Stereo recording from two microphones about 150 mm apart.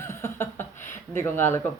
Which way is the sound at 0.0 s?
15° left (ahead or behind).